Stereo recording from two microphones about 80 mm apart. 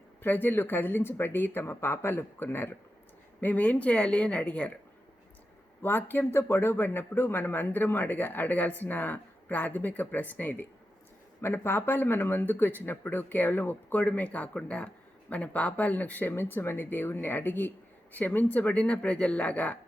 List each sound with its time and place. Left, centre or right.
0.2 s speech: left
5.8 s speech: left